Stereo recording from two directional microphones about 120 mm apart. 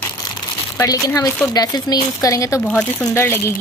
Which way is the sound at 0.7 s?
30° left (ahead or behind).